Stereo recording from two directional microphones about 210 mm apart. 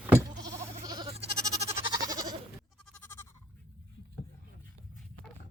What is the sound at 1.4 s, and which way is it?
Goat, 15° right (ahead or behind).